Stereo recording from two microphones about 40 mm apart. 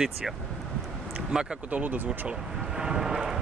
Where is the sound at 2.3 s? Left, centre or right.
Centre.